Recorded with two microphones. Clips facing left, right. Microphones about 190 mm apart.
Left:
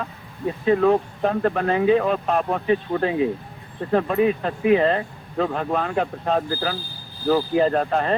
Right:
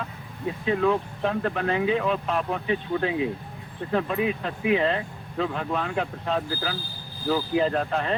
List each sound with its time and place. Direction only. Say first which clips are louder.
0.6 s speech: left 6 dB; 45° left (ahead or behind)